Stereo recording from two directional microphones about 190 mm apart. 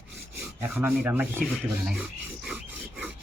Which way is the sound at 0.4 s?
10° right (ahead or behind).